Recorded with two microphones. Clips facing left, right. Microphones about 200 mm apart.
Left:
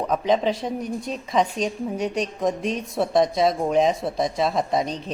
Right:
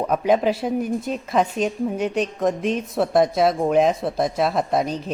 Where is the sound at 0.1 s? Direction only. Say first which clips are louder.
Right 2 dB; 5° right (ahead or behind).